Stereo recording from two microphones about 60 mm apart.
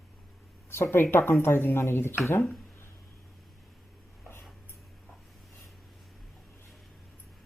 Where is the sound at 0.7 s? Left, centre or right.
Left.